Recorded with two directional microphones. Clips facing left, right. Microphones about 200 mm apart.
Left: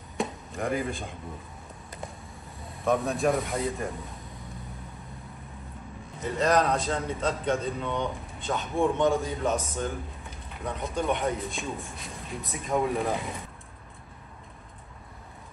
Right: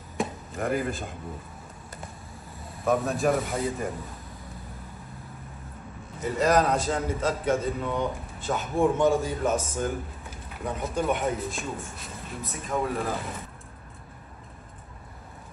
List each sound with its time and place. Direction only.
0.2 s chop: centre (ahead or behind)
2.8 s a man's voice: centre (ahead or behind)
6.2 s a man's voice: 5° right (ahead or behind)